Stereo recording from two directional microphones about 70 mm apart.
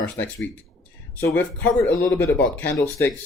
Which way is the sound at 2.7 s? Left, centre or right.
Left.